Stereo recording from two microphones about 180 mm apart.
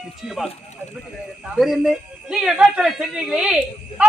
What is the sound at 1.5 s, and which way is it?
A woman's voice, centre (ahead or behind).